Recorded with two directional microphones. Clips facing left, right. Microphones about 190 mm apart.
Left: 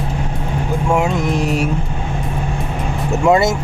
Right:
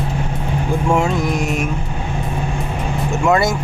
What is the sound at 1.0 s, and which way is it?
Speech, 20° left (ahead or behind).